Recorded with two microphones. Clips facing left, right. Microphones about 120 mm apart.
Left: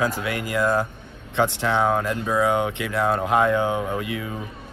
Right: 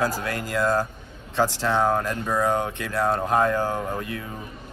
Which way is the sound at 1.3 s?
60° left (ahead or behind).